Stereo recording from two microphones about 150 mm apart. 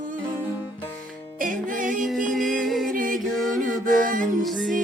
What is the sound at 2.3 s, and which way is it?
Music, centre (ahead or behind).